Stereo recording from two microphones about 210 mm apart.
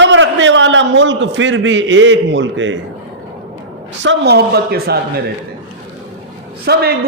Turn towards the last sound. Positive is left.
turn(degrees=-50)  # may be behind; listen again after turning